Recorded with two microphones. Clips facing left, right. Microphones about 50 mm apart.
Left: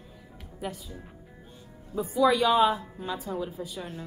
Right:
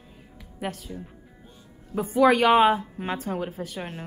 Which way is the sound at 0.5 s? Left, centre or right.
Right.